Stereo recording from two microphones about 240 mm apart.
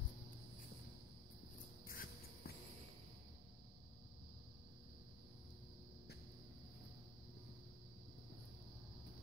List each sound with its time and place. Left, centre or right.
1.9 s music: left